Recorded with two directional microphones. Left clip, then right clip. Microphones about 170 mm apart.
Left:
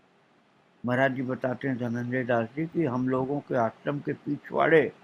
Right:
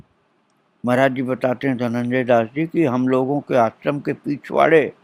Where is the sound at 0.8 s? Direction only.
50° right (ahead or behind).